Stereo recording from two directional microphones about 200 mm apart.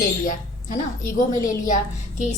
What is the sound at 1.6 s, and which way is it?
Speech, 40° left (ahead or behind).